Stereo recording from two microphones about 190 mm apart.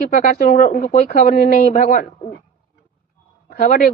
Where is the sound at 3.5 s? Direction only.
50° left (ahead or behind).